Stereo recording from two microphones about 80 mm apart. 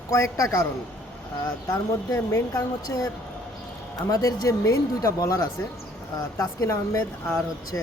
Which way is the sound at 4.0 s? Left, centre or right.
Left.